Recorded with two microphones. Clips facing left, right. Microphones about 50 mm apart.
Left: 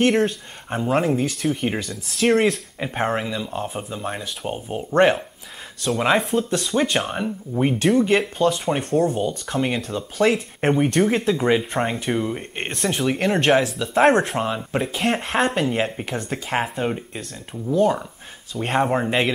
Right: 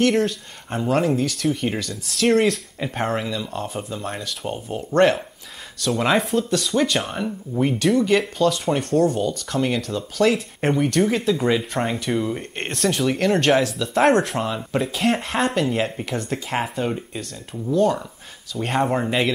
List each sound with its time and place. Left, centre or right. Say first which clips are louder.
0.7 s speech: even; centre
6.3 s speech: even; left
18.8 s speech: left 1 dB; centre